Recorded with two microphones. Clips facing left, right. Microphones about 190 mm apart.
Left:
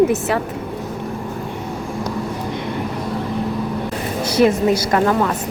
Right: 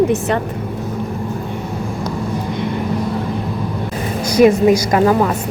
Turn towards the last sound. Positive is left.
turn(degrees=-10)  # may be behind; listen again after turning